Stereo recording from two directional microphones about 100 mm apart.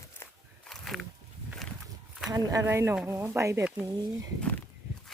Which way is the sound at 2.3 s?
40° right (ahead or behind).